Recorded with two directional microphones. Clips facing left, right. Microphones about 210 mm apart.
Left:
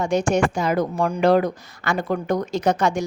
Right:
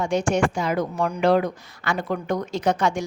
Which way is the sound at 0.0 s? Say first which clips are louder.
Left 2 dB; 40° left (ahead or behind).